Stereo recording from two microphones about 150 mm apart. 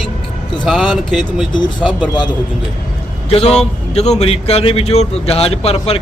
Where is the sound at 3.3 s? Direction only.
45° left (ahead or behind).